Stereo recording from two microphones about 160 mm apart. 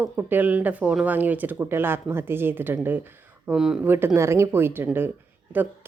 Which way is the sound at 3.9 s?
15° right (ahead or behind).